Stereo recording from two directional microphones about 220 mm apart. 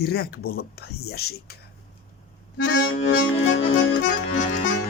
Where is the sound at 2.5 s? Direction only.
50° left (ahead or behind).